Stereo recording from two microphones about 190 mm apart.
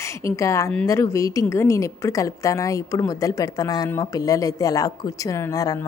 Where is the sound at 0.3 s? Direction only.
15° left (ahead or behind).